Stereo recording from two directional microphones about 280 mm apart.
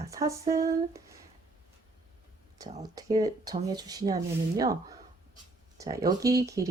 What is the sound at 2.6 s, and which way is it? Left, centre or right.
Speech, centre.